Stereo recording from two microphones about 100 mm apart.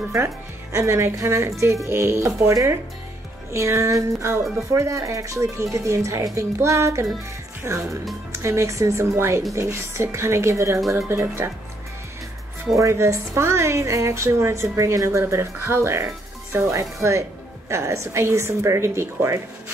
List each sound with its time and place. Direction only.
0.7 s a woman's voice: 30° right (ahead or behind)
12.7 s a woman's voice: 30° right (ahead or behind)